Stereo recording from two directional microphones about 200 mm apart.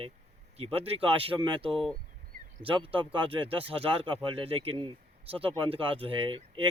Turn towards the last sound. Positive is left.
turn(degrees=-25)  # may be behind; listen again after turning